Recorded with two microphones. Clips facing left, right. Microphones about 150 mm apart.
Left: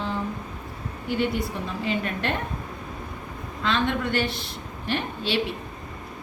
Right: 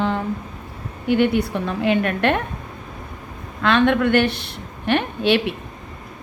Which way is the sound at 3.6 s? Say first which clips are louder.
Right 8 dB; 65° right (ahead or behind).